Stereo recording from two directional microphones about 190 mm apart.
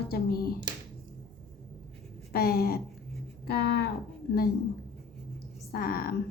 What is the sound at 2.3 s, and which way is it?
A woman's voice, 55° left (ahead or behind).